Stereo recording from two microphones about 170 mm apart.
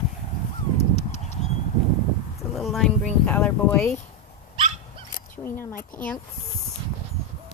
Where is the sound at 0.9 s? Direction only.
40° left (ahead or behind).